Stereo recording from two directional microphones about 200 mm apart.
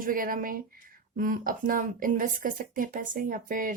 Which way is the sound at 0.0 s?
45° right (ahead or behind).